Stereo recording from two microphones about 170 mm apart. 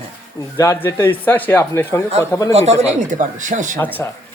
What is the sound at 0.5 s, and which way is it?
Speech, 15° left (ahead or behind).